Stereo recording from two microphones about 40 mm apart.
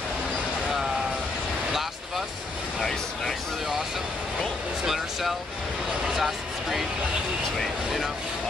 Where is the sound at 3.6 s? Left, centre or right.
Centre.